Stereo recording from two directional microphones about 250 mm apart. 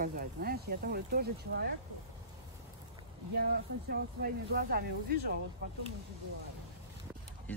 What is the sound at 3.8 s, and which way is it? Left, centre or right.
Speech, right.